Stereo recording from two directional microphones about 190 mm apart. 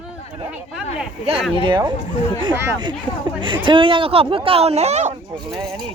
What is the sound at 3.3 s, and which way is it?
Speech, 25° right (ahead or behind).